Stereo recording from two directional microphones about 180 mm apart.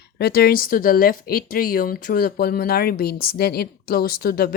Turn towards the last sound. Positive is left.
turn(degrees=55)  # may be behind; listen again after turning